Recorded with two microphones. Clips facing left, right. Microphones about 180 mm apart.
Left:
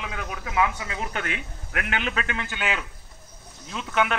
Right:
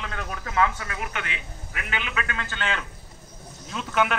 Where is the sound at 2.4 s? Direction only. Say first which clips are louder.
Left 1 dB; 10° left (ahead or behind).